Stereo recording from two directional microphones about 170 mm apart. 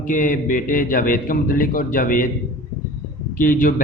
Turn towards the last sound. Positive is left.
turn(degrees=55)  # may be behind; listen again after turning